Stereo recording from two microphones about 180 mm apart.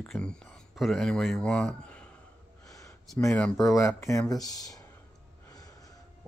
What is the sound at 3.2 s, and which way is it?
Speech, 10° left (ahead or behind).